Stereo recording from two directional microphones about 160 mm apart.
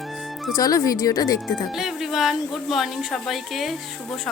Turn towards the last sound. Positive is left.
turn(degrees=0)  # may be behind; listen again after turning